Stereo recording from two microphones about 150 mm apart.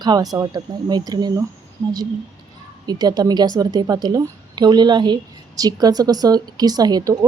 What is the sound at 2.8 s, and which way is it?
Speech, 25° right (ahead or behind).